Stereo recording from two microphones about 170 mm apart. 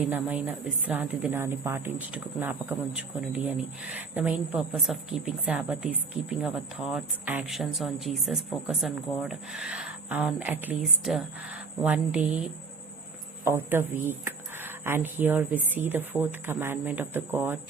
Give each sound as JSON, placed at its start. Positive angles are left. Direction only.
{"t": 0.0, "sound": "speech", "side_deg": -10}